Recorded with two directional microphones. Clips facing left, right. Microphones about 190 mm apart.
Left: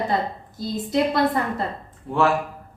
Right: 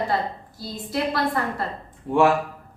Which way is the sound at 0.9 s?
20° left (ahead or behind).